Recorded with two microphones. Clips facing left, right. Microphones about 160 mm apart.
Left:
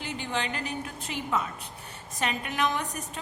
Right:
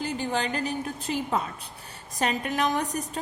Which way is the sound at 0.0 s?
40° right (ahead or behind).